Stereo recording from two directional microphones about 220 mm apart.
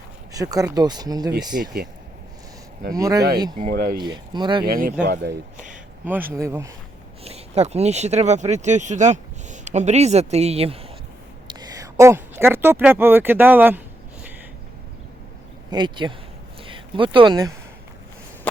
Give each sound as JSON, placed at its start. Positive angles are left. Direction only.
{"t": 0.3, "sound": "speech", "side_deg": -15}
{"t": 1.5, "sound": "speech", "side_deg": -45}
{"t": 2.9, "sound": "speech", "side_deg": -15}
{"t": 3.6, "sound": "speech", "side_deg": -40}
{"t": 4.0, "sound": "speech", "side_deg": -20}
{"t": 4.6, "sound": "speech", "side_deg": -40}
{"t": 5.7, "sound": "a sound", "side_deg": -10}
{"t": 6.3, "sound": "speech", "side_deg": -15}
{"t": 7.3, "sound": "speech", "side_deg": -30}
{"t": 11.4, "sound": "a sound", "side_deg": -15}
{"t": 15.7, "sound": "speech", "side_deg": -20}
{"t": 16.6, "sound": "a sound", "side_deg": -25}